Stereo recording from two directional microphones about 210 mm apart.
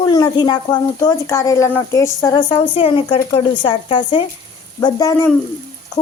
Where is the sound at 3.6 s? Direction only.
25° left (ahead or behind).